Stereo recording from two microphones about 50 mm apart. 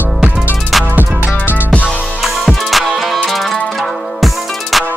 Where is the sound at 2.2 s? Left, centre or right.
Centre.